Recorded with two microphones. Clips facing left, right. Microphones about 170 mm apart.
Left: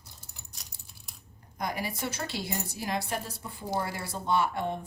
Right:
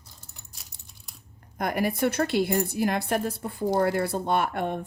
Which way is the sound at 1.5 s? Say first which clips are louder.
Right 8 dB; 55° right (ahead or behind).